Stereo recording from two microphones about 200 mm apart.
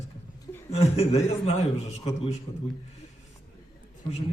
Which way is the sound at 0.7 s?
30° left (ahead or behind).